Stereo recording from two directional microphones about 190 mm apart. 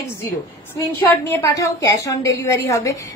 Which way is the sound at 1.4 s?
15° left (ahead or behind).